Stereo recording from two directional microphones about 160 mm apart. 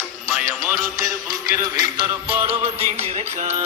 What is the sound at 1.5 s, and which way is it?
Music, 25° right (ahead or behind).